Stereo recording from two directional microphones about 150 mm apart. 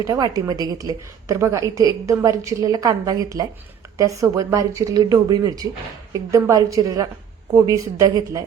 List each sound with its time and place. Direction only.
0.0 s a woman's voice: 25° right (ahead or behind)